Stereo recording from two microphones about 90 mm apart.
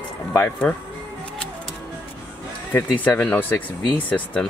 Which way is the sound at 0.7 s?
10° left (ahead or behind).